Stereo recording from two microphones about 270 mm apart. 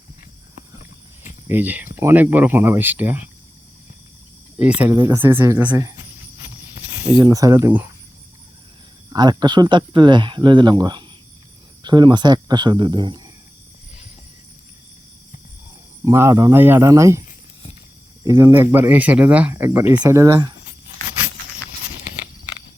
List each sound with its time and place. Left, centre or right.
1.5 s speech: centre
4.6 s speech: centre
7.1 s speech: centre
9.1 s speech: centre
16.0 s speech: centre
18.3 s speech: centre